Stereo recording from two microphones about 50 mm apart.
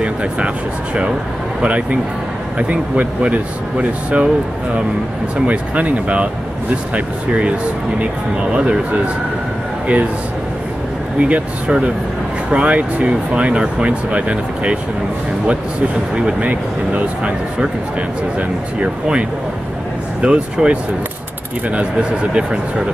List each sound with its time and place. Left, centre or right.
0.0 s speech: right
1.6 s speech: right
5.5 s speech: right
8.0 s speech: right
11.1 s speech: right
16.3 s speech: right
18.8 s speech: right